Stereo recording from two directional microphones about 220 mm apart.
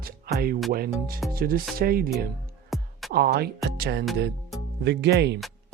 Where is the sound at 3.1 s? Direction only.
45° right (ahead or behind).